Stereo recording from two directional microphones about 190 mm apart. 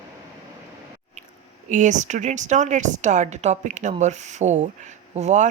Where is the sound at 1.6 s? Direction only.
40° right (ahead or behind).